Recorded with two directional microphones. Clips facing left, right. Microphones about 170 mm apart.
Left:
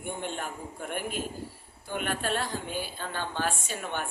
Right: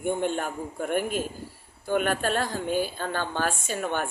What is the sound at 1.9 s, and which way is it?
A woman's voice, 45° right (ahead or behind).